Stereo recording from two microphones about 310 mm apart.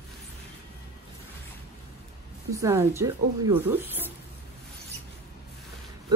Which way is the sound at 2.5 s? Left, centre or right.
Centre.